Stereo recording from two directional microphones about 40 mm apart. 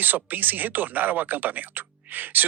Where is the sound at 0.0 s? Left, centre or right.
Right.